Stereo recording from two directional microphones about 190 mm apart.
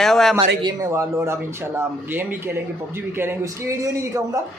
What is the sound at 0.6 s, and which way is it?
Speech, 20° right (ahead or behind).